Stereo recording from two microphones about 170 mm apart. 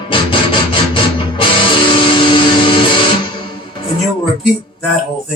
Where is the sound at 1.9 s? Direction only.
30° left (ahead or behind).